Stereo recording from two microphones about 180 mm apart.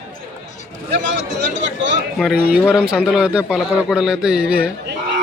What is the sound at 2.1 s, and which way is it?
A man's voice, 5° right (ahead or behind).